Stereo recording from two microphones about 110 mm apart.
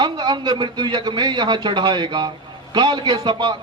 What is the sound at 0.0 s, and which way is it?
A man's voice, 40° right (ahead or behind).